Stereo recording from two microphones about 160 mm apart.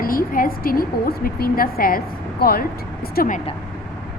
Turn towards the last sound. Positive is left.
turn(degrees=65)  # may be behind; listen again after turning